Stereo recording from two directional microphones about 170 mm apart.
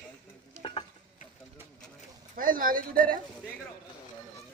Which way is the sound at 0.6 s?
30° left (ahead or behind).